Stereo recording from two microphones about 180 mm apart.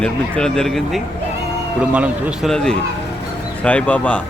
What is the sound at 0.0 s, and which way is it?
A man's voice, 5° left (ahead or behind).